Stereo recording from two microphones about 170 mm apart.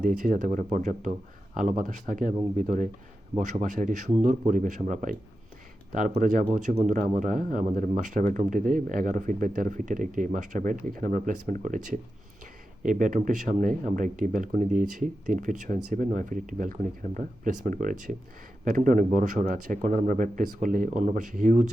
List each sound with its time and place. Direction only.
0.0 s speech: 50° right (ahead or behind)